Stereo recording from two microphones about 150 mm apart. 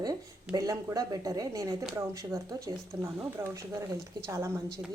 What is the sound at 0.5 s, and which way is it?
A woman's voice, 25° right (ahead or behind).